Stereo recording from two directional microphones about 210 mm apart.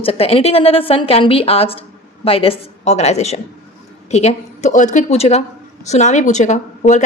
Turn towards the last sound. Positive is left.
turn(degrees=35)  # may be behind; listen again after turning